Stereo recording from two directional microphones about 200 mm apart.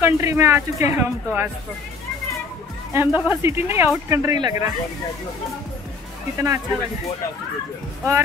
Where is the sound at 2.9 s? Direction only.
10° right (ahead or behind).